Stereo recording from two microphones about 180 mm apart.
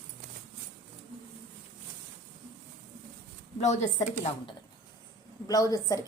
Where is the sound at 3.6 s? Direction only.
40° left (ahead or behind).